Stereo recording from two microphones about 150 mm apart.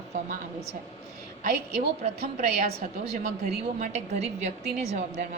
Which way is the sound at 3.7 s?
50° right (ahead or behind).